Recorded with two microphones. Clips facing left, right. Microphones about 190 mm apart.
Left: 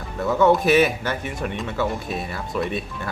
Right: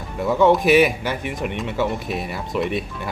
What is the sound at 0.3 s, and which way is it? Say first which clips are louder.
Speech: right 2 dB; 15° right (ahead or behind).